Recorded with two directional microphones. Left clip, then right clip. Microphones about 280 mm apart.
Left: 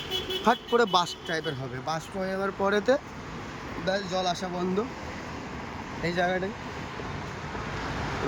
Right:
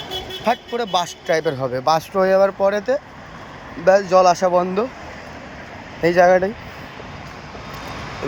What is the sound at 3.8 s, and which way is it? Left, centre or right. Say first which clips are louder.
Speech: right 16 dB; right.